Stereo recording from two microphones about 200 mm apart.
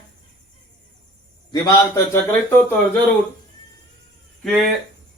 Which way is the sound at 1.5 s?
15° left (ahead or behind).